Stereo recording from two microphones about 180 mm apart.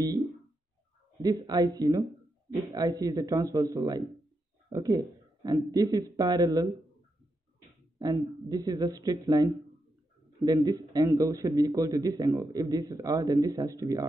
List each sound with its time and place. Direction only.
1.2 s a man's voice: 20° right (ahead or behind)
8.5 s a man's voice: 20° right (ahead or behind)